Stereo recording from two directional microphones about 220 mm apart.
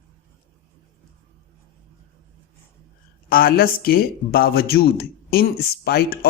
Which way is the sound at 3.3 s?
40° left (ahead or behind).